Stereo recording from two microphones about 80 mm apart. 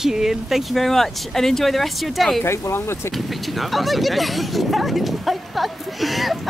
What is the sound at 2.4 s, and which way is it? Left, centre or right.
Speech, left.